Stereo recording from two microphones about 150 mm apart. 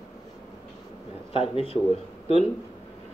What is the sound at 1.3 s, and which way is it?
Speech, 40° left (ahead or behind).